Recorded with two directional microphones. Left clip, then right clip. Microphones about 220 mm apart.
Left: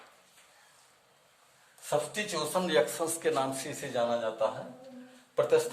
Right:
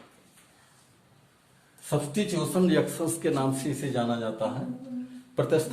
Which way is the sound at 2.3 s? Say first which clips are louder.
Right 1 dB; 20° left (ahead or behind).